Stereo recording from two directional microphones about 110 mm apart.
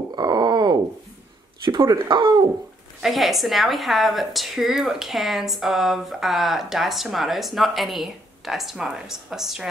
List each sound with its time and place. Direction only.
0.1 s a sound: 40° right (ahead or behind)
1.8 s speech: 40° right (ahead or behind)
3.0 s speech: centre (ahead or behind)